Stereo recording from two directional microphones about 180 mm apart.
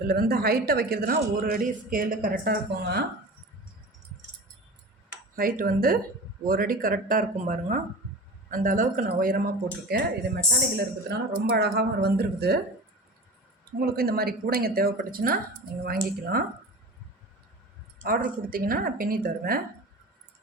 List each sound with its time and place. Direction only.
0.0 s a man's voice: 60° right (ahead or behind)
5.4 s a woman's voice: 55° right (ahead or behind)
13.7 s a man's voice: 55° right (ahead or behind)
18.0 s a woman's voice: 50° right (ahead or behind)